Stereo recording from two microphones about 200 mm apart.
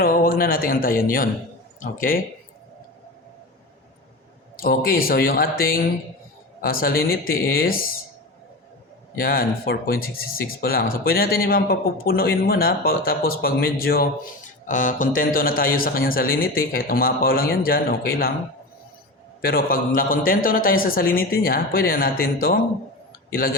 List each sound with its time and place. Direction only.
0.0 s speech: 45° left (ahead or behind)
4.6 s speech: 50° left (ahead or behind)
9.1 s speech: 50° left (ahead or behind)
19.4 s speech: 50° left (ahead or behind)